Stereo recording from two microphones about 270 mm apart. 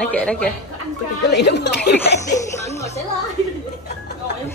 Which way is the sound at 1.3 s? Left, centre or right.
Left.